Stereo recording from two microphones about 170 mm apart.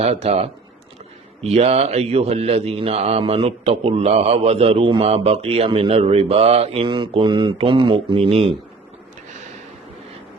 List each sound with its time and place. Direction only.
0.0 s speech: 40° right (ahead or behind)